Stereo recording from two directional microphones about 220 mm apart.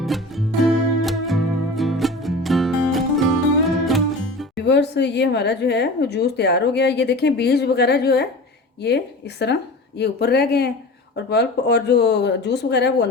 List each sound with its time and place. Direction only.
0.0 s music: centre (ahead or behind)
4.5 s a woman's voice: 50° left (ahead or behind)